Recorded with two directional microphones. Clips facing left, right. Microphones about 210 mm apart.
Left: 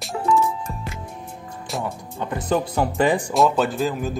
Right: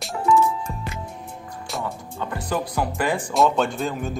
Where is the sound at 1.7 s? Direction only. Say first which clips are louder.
Left 2 dB; centre (ahead or behind).